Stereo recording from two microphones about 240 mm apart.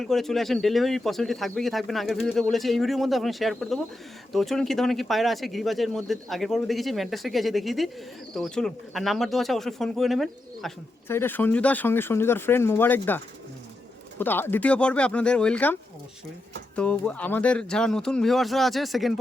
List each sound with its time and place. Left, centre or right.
0.0 s speech: centre